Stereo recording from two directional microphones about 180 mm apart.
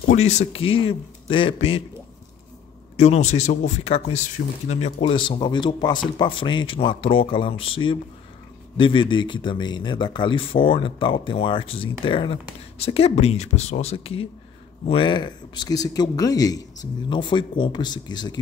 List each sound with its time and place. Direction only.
0.1 s speech: 35° left (ahead or behind)
3.0 s speech: 40° left (ahead or behind)